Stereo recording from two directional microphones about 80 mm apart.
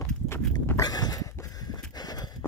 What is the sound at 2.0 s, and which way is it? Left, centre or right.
Horse, left.